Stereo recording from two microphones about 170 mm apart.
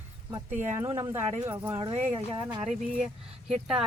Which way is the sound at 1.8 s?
30° right (ahead or behind).